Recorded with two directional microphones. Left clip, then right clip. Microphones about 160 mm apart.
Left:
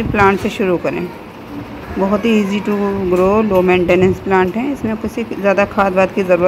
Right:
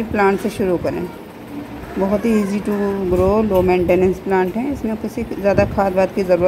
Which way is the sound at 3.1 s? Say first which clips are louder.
Left 3 dB; centre (ahead or behind).